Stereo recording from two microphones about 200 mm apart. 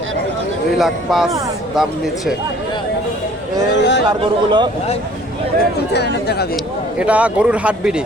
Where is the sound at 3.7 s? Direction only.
60° left (ahead or behind).